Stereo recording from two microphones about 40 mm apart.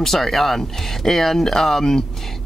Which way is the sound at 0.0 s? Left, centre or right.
Centre.